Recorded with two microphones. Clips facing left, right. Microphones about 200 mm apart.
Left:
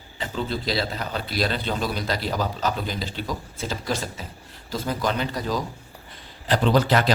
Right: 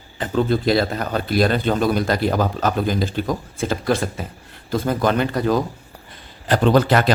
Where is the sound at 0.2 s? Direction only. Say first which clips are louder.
Right 9 dB; 55° right (ahead or behind).